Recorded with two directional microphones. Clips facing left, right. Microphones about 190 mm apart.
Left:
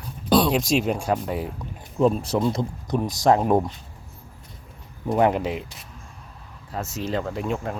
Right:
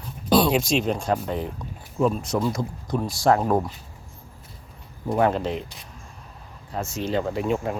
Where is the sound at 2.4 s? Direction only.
20° left (ahead or behind).